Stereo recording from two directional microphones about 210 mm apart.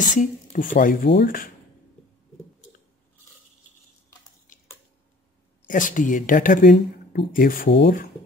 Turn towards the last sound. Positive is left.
turn(degrees=40)  # may be behind; listen again after turning